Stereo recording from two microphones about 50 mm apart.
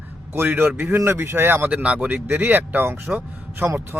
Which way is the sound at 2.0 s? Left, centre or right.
Right.